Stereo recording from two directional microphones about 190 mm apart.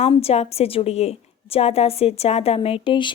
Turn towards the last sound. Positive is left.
turn(degrees=25)  # may be behind; listen again after turning